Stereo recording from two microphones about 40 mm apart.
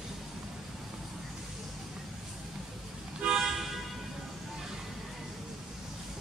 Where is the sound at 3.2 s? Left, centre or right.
Centre.